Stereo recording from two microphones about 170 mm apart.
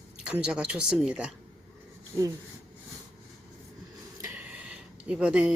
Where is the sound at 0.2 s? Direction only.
5° right (ahead or behind).